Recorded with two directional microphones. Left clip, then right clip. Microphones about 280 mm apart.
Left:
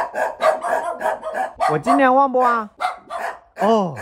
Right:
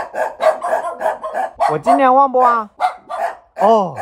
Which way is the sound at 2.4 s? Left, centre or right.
Centre.